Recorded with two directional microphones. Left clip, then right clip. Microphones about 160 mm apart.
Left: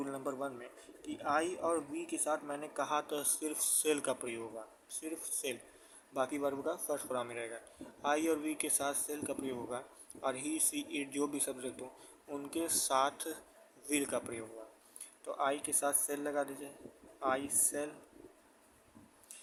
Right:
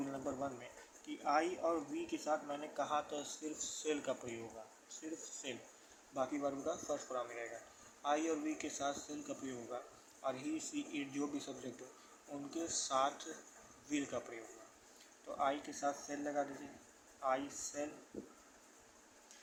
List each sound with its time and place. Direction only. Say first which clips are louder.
0.0 s speech: left 3 dB; 40° left (ahead or behind)
15.4 s speech: left 3 dB; 50° left (ahead or behind)